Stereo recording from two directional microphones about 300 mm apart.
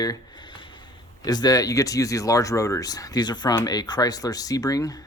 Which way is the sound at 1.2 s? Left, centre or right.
Centre.